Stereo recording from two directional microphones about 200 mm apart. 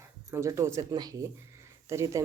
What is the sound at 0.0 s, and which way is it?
Speech, 15° right (ahead or behind).